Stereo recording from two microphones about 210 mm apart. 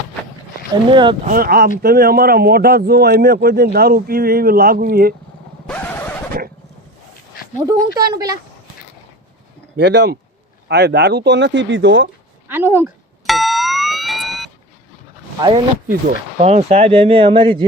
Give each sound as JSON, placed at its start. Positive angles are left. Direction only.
{"t": 0.9, "sound": "speech", "side_deg": -25}
{"t": 1.3, "sound": "speech", "side_deg": -45}
{"t": 5.6, "sound": "vehicle", "side_deg": 5}
{"t": 7.7, "sound": "speech", "side_deg": -15}
{"t": 9.7, "sound": "speech", "side_deg": -55}
{"t": 12.5, "sound": "speech", "side_deg": -10}
{"t": 13.2, "sound": "a sound", "side_deg": 0}
{"t": 15.4, "sound": "speech", "side_deg": -25}